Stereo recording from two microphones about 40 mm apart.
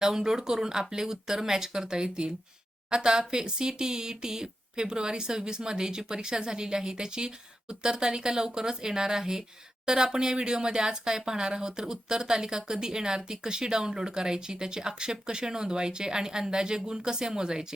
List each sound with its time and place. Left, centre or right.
0.0 s speech: centre